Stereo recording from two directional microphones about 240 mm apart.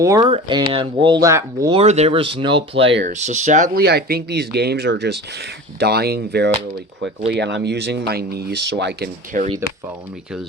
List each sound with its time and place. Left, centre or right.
0.0 s speech: centre
1.8 s speech: right